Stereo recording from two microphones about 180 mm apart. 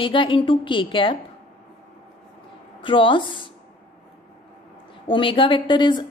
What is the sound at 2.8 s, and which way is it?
Speech, 30° left (ahead or behind).